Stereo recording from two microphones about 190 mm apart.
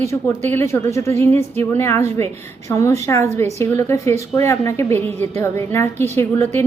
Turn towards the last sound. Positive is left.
turn(degrees=15)  # may be behind; listen again after turning